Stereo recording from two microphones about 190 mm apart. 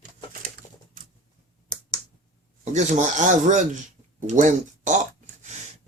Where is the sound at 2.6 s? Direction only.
40° right (ahead or behind).